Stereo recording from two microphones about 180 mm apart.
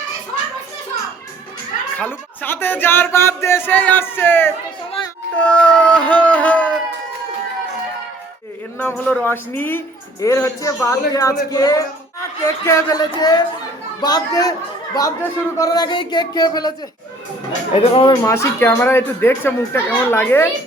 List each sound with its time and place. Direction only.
2.0 s speech: 10° left (ahead or behind)
8.8 s speech: 10° left (ahead or behind)
17.7 s speech: 30° left (ahead or behind)
18.3 s speech: 15° left (ahead or behind)